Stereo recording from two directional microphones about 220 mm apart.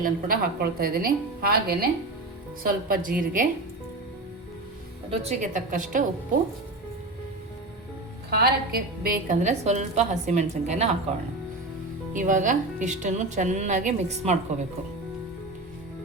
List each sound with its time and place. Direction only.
0.0 s a woman's voice: 40° right (ahead or behind)
5.1 s a woman's voice: 30° right (ahead or behind)
8.3 s a woman's voice: 45° right (ahead or behind)
12.1 s a woman's voice: 35° right (ahead or behind)